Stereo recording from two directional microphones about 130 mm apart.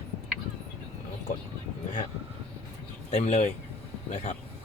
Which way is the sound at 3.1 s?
60° left (ahead or behind).